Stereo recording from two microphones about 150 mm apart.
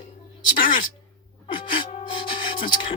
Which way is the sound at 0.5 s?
65° left (ahead or behind).